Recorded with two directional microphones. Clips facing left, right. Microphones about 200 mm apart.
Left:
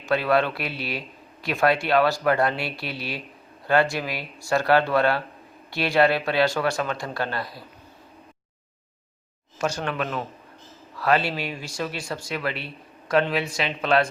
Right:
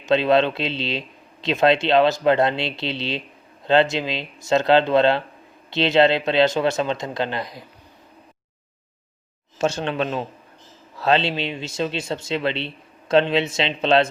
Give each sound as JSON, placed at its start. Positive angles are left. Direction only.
{"t": 0.0, "sound": "speech", "side_deg": -20}
{"t": 9.6, "sound": "speech", "side_deg": -25}